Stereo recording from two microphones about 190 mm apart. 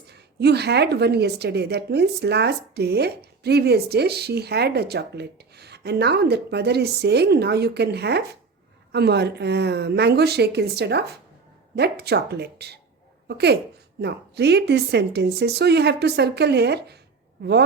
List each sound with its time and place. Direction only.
0.1 s a woman's voice: 60° right (ahead or behind)